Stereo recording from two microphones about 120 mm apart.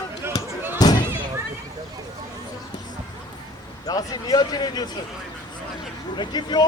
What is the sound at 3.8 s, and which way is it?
Speech, 35° left (ahead or behind).